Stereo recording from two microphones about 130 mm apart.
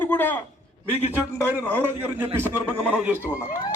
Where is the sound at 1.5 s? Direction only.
15° right (ahead or behind).